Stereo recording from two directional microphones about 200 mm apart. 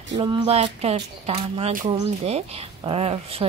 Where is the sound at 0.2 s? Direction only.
25° right (ahead or behind).